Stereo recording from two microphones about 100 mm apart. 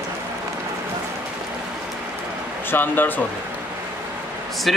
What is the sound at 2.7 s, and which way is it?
Speech, 20° left (ahead or behind).